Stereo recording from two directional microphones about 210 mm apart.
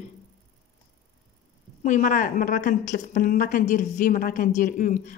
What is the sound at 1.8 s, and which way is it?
Speech, 35° left (ahead or behind).